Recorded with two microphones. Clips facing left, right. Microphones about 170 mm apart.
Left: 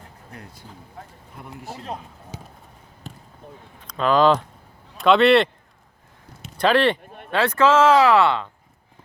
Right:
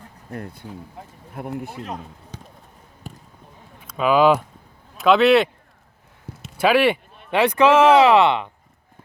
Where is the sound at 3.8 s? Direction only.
5° right (ahead or behind).